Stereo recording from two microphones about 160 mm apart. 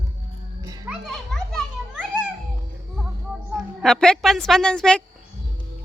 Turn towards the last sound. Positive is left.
turn(degrees=5)  # may be behind; listen again after turning